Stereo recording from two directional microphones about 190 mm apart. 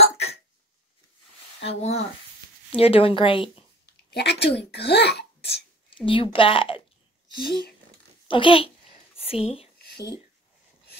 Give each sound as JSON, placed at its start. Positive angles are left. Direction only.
{"t": 0.0, "sound": "hiccup", "side_deg": 35}
{"t": 1.6, "sound": "speech", "side_deg": 35}
{"t": 4.1, "sound": "speech", "side_deg": 60}
{"t": 5.9, "sound": "speech", "side_deg": 25}
{"t": 7.3, "sound": "speech", "side_deg": 55}
{"t": 8.3, "sound": "a sound", "side_deg": 25}
{"t": 9.8, "sound": "a sound", "side_deg": 55}